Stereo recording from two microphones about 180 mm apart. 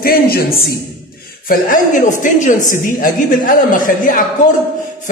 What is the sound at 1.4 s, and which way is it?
A woman's voice, 50° left (ahead or behind).